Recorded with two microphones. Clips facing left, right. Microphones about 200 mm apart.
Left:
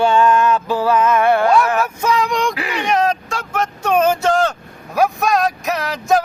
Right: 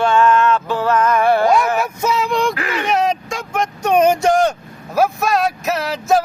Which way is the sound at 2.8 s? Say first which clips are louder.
Left 1 dB; 10° right (ahead or behind).